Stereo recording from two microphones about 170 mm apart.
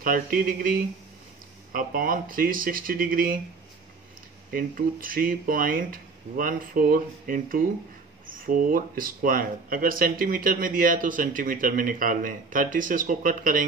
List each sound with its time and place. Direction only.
0.0 s speech: 55° right (ahead or behind)
4.5 s speech: 55° right (ahead or behind)